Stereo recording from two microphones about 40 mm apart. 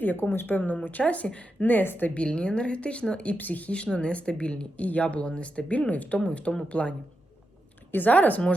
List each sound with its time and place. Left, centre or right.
0.0 s speech: left
0.9 s a woman's voice: left
1.6 s a woman's voice: left
2.1 s a woman's voice: left
3.3 s a woman's voice: left
3.8 s a woman's voice: left
7.9 s a woman's voice: left